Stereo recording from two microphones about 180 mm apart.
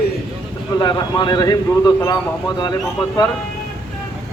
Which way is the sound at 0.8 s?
25° left (ahead or behind).